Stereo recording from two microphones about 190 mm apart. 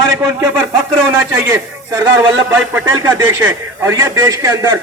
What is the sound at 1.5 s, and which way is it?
A man's voice, 15° right (ahead or behind).